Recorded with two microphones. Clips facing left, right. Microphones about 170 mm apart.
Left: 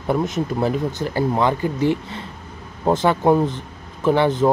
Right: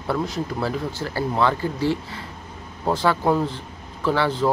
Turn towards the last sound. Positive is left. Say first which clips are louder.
# left 5 dB
turn(degrees=20)  # may be behind; listen again after turning